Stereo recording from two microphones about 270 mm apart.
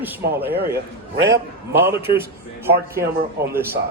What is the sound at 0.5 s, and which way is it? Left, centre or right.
Speech, right.